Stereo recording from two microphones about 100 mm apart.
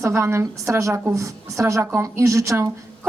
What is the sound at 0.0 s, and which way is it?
A woman's voice, 30° right (ahead or behind).